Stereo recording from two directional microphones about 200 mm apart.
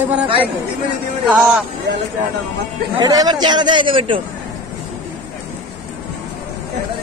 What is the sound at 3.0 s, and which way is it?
A man's voice, 20° right (ahead or behind).